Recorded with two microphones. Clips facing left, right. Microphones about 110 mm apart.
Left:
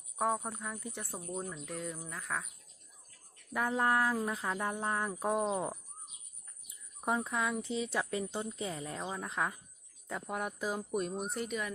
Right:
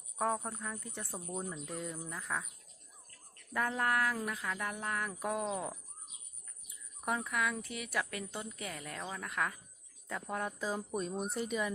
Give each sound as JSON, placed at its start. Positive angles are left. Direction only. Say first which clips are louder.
{"t": 0.2, "sound": "speech", "louder": "left 1 dB", "side_deg": 10}
{"t": 1.3, "sound": "speech", "louder": "left 1 dB", "side_deg": -5}
{"t": 3.5, "sound": "speech", "louder": "left 2 dB", "side_deg": 15}
{"t": 7.0, "sound": "speech", "louder": "left 2 dB", "side_deg": 25}